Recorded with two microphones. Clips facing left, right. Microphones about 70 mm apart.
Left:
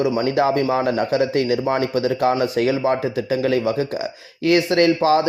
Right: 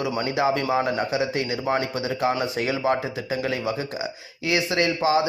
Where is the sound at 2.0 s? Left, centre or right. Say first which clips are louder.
Left 6 dB; left.